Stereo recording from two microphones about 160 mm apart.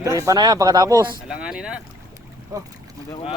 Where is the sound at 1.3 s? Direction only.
5° right (ahead or behind).